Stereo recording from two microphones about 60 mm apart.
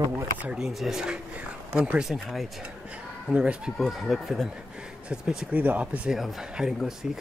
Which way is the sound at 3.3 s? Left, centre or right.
Centre.